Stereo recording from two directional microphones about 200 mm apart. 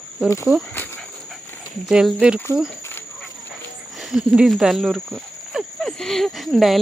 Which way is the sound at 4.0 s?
5° right (ahead or behind).